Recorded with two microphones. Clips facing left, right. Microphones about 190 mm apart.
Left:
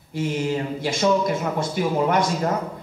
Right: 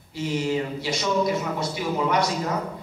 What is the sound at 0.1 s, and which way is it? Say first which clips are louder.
A man's voice: left 1 dB; 50° left (ahead or behind).